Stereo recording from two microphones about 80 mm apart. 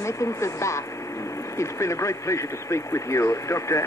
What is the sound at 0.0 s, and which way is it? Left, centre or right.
Speech, left.